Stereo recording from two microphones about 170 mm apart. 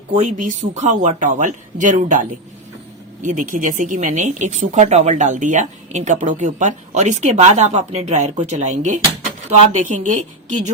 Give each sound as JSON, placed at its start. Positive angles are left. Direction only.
{"t": 0.1, "sound": "a woman's voice", "side_deg": -45}
{"t": 3.2, "sound": "a woman's voice", "side_deg": -50}